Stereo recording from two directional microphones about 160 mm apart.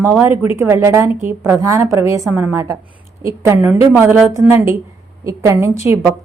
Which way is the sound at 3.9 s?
5° right (ahead or behind).